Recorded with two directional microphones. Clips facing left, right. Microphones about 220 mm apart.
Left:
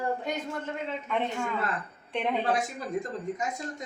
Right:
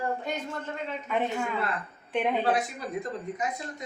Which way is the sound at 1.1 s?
5° right (ahead or behind).